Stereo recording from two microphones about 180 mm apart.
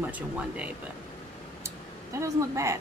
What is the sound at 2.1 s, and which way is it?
Speech, 15° right (ahead or behind).